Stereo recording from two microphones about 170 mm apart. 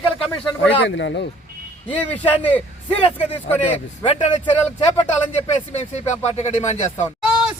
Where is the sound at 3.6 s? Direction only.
40° left (ahead or behind).